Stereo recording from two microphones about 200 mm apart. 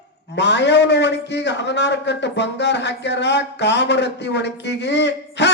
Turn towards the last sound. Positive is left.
turn(degrees=60)  # may be behind; listen again after turning